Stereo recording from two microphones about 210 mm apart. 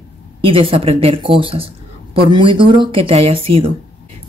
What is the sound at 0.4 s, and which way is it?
Speech, 25° right (ahead or behind).